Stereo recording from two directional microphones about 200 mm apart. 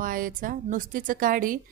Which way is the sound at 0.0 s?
45° right (ahead or behind).